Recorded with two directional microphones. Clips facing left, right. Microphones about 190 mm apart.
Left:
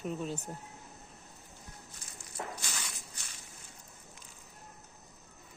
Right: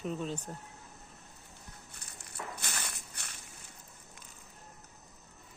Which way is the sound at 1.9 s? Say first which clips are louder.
Left 1 dB; 60° right (ahead or behind).